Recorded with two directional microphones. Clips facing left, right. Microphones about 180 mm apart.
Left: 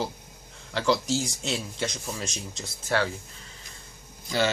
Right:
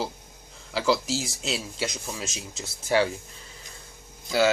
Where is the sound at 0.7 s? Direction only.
5° right (ahead or behind).